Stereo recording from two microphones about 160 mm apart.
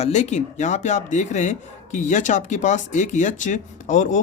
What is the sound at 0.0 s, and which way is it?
Speech, 45° left (ahead or behind).